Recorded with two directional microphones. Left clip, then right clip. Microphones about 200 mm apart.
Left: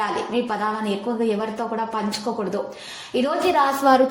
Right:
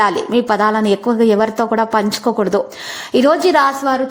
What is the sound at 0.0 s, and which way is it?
A woman's voice, 45° right (ahead or behind).